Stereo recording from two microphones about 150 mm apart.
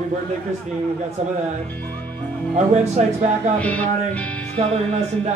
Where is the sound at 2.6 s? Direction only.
45° right (ahead or behind).